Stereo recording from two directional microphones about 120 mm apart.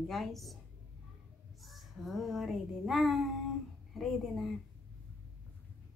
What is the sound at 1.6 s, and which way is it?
A child's voice, centre (ahead or behind).